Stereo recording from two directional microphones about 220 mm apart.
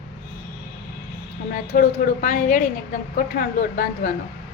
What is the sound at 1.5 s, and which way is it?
A woman's voice, 35° left (ahead or behind).